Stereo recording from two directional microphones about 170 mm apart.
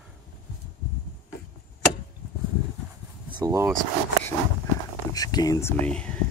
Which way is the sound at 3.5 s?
15° right (ahead or behind).